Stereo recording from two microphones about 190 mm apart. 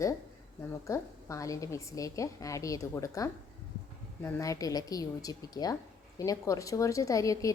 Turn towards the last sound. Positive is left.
turn(degrees=15)  # may be behind; listen again after turning